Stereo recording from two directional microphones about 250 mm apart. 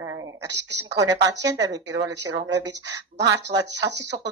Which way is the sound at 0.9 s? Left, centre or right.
Centre.